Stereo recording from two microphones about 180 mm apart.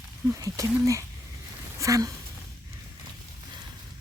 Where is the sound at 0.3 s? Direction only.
20° right (ahead or behind).